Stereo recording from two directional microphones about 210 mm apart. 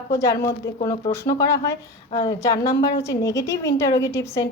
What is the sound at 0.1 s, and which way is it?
Speech, 15° left (ahead or behind).